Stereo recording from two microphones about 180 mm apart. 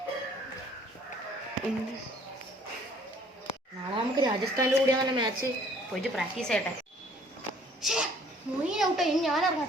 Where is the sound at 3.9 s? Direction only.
25° right (ahead or behind).